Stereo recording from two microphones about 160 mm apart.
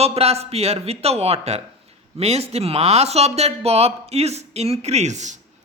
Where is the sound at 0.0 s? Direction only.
40° right (ahead or behind).